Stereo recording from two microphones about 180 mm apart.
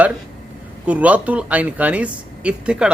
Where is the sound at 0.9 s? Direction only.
10° right (ahead or behind).